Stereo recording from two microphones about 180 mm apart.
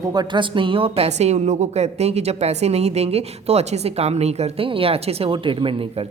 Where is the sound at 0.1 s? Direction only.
25° right (ahead or behind).